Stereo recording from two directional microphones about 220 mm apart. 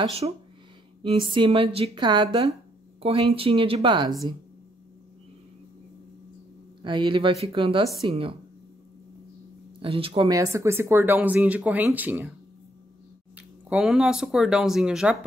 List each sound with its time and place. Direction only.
0.2 s a woman's voice: 25° right (ahead or behind)
6.8 s a woman's voice: 20° right (ahead or behind)
9.8 s speech: 25° right (ahead or behind); by 12.3 s 10° right (ahead or behind)
13.4 s speech: 5° right (ahead or behind)